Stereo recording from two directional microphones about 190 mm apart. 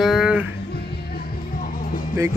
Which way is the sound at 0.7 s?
55° left (ahead or behind).